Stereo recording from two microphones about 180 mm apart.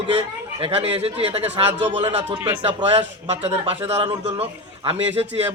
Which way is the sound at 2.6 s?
35° right (ahead or behind).